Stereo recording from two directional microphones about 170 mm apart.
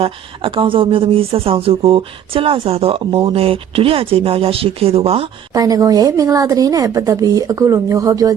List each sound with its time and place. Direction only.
0.0 s speech: 30° right (ahead or behind)
5.5 s speech: 20° right (ahead or behind)